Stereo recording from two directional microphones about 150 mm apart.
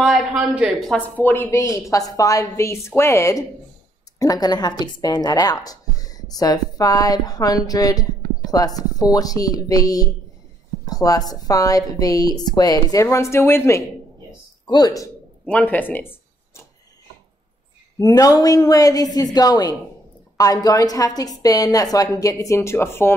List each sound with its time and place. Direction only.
0.0 s a woman's voice: centre (ahead or behind)
1.0 s a woman's voice: 10° left (ahead or behind)
15.4 s speech: 10° left (ahead or behind)
17.9 s a woman's voice: 25° left (ahead or behind)